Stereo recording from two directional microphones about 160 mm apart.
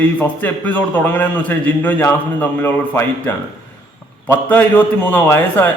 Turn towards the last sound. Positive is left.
turn(degrees=10)  # may be behind; listen again after turning